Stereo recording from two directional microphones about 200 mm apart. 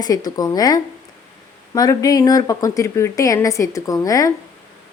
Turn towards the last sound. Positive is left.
turn(degrees=15)  # may be behind; listen again after turning